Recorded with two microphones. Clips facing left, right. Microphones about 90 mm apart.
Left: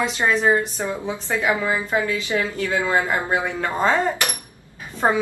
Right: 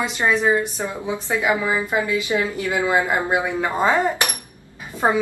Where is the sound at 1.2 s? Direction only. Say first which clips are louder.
Right 1 dB; 15° right (ahead or behind).